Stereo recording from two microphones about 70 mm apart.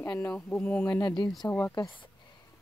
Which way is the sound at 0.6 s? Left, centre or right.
Centre.